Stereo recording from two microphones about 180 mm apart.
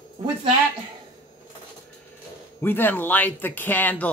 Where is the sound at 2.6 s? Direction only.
10° left (ahead or behind).